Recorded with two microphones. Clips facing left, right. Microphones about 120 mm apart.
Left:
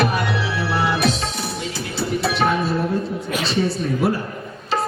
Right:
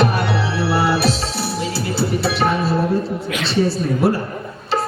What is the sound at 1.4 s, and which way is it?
Music, 35° right (ahead or behind).